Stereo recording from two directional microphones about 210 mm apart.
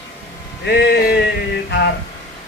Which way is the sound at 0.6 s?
55° left (ahead or behind).